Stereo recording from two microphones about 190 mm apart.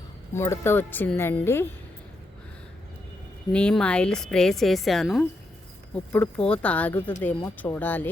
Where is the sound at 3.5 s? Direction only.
5° left (ahead or behind).